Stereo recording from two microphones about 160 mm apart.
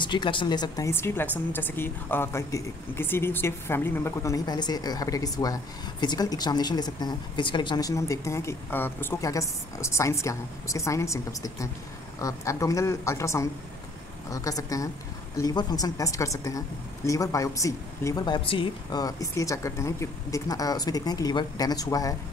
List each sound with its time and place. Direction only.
0.0 s speech: 30° left (ahead or behind)